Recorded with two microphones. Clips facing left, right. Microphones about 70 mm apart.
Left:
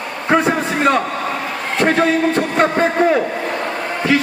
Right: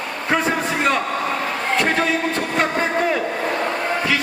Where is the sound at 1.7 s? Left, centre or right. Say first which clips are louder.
Left 6 dB; left.